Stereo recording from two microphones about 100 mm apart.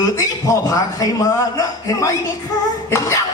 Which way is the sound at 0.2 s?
35° left (ahead or behind).